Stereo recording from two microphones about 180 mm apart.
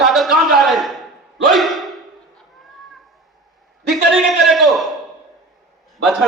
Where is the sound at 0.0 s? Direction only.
Centre (ahead or behind).